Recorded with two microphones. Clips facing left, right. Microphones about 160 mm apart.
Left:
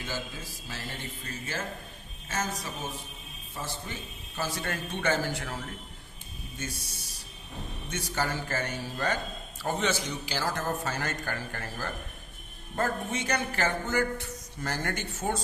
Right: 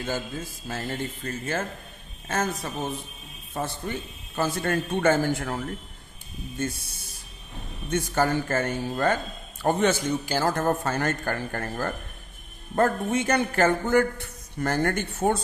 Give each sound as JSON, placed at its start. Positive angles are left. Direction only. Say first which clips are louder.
{"t": 0.0, "sound": "a man's voice", "louder": "right 6 dB", "side_deg": -50}
{"t": 6.6, "sound": "a man's voice", "louder": "right 9 dB", "side_deg": -55}